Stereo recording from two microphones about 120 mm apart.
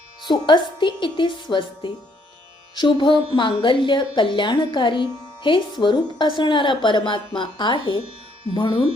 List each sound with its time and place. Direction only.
0.2 s a woman's voice: 40° left (ahead or behind)